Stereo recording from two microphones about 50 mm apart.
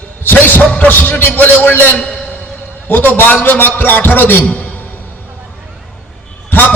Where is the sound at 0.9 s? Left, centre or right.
Left.